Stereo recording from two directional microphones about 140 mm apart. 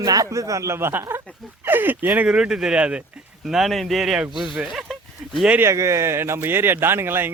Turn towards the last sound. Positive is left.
turn(degrees=-15)  # may be behind; listen again after turning